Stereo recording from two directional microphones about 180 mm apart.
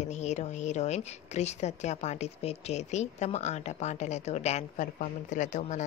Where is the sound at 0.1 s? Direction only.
40° left (ahead or behind).